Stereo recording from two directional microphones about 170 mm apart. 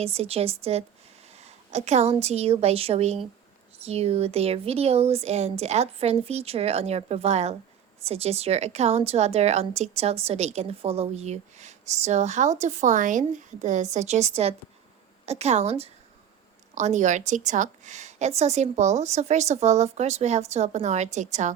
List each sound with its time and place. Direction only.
0.0 s a woman's voice: 35° right (ahead or behind)